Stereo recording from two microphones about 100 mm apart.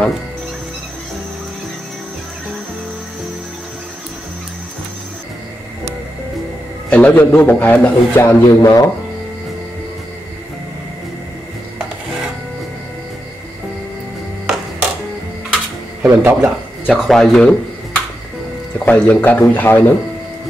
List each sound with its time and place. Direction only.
6.9 s a man's voice: 15° left (ahead or behind)
8.2 s speech: 30° left (ahead or behind)
14.4 s music: 10° right (ahead or behind)
16.0 s speech: 20° right (ahead or behind)
16.4 s speech: centre (ahead or behind)
18.9 s a man's voice: 15° left (ahead or behind)